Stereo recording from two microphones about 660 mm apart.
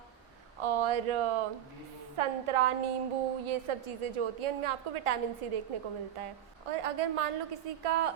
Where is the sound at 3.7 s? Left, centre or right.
Right.